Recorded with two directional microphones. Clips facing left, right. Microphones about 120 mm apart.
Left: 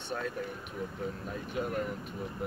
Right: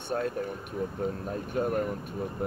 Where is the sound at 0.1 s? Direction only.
45° right (ahead or behind).